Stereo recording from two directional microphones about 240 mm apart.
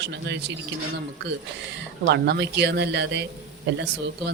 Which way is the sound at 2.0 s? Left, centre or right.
Right.